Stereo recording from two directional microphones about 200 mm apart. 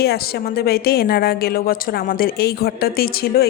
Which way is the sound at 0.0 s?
50° left (ahead or behind).